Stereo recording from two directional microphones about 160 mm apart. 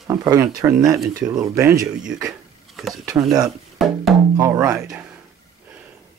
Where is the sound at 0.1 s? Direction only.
25° right (ahead or behind).